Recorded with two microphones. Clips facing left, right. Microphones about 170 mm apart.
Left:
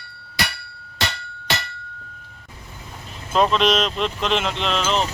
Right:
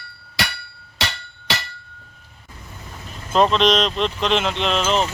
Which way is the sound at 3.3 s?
Centre (ahead or behind).